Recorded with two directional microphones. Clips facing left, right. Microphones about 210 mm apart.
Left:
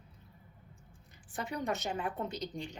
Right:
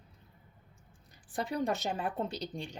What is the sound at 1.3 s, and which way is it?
A woman's voice, 35° right (ahead or behind).